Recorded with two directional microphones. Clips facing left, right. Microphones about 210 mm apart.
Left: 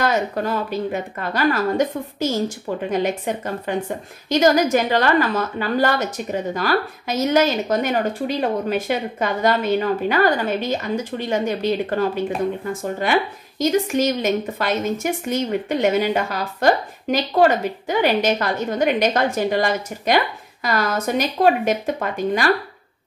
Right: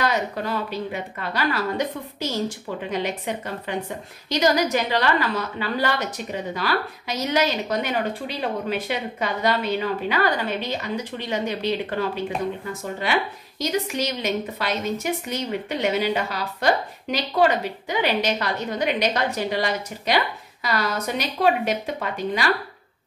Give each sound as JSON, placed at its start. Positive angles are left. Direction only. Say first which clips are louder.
{"t": 0.0, "sound": "a woman's voice", "louder": "left 4 dB", "side_deg": 45}